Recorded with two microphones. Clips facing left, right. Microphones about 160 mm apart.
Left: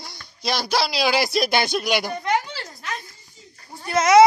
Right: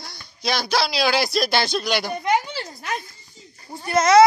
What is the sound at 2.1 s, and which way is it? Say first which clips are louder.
Speech: right 2 dB; 10° right (ahead or behind).